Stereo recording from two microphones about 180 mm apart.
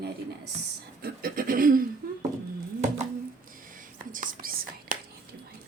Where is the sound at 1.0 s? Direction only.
50° right (ahead or behind).